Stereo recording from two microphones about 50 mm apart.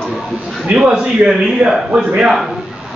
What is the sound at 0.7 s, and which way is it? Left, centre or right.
Speech, centre.